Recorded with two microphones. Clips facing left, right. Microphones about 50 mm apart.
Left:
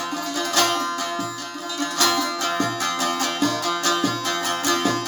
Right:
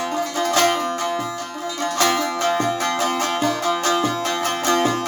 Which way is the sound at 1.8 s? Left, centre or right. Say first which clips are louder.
Right 2 dB; right.